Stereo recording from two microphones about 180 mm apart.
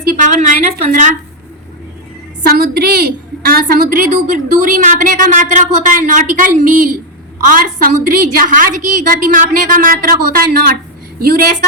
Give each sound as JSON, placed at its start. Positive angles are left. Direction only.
{"t": 0.0, "sound": "a woman's voice", "side_deg": -50}
{"t": 2.5, "sound": "a woman's voice", "side_deg": -60}